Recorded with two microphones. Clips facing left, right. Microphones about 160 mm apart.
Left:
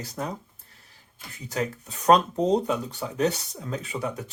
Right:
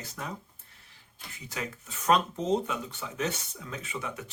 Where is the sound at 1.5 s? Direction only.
40° left (ahead or behind).